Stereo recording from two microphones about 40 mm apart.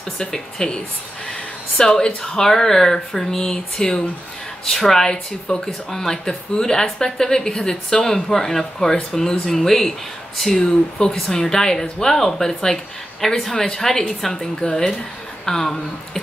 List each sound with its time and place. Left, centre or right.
0.3 s speech: left
10.6 s speech: centre